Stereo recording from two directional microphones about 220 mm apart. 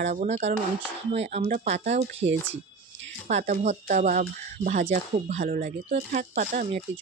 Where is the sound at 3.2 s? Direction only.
30° right (ahead or behind).